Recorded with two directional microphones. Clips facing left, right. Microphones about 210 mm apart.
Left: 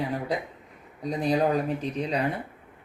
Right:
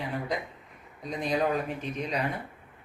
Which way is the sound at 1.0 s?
35° left (ahead or behind).